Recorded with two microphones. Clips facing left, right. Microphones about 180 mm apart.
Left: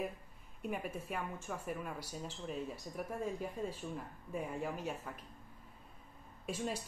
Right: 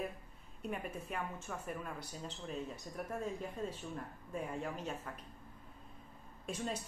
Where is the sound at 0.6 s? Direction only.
5° left (ahead or behind).